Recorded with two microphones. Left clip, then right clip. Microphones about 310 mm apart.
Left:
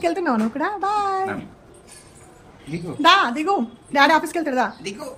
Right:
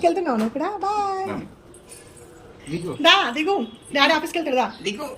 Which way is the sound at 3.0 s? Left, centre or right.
Centre.